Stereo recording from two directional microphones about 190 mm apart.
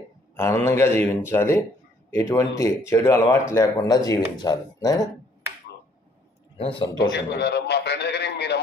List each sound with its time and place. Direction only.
0.7 s speech: 15° left (ahead or behind)
6.5 s speech: 30° left (ahead or behind)
7.0 s a man's voice: 60° left (ahead or behind)